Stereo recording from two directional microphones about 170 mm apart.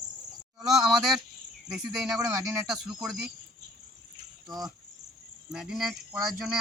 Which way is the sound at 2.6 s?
Centre (ahead or behind).